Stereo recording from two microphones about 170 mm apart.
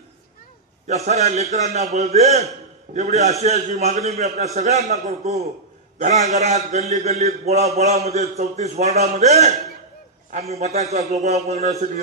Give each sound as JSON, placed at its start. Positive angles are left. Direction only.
{"t": 0.8, "sound": "a man's voice", "side_deg": -40}